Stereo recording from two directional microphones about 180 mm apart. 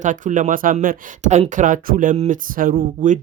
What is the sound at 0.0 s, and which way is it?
Speech, 45° right (ahead or behind).